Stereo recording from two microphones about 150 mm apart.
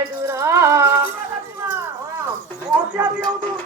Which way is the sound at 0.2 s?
20° right (ahead or behind).